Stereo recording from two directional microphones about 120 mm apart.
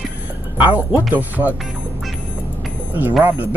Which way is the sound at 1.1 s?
15° right (ahead or behind).